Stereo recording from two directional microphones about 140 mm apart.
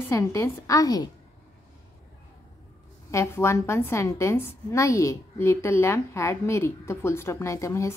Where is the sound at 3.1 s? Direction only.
20° left (ahead or behind).